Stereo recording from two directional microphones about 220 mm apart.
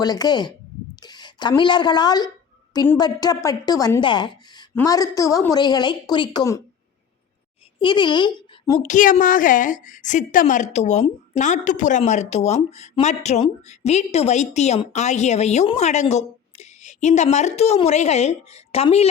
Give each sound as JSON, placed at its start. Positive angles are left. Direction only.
{"t": 0.0, "sound": "a woman's voice", "side_deg": 15}
{"t": 7.8, "sound": "a woman's voice", "side_deg": 20}
{"t": 8.8, "sound": "a woman's voice", "side_deg": 35}